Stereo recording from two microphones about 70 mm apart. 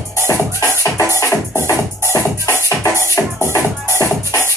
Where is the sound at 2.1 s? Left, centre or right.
Left.